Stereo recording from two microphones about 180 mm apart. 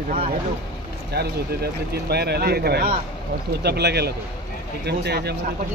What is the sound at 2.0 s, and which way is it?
Speech, 65° right (ahead or behind).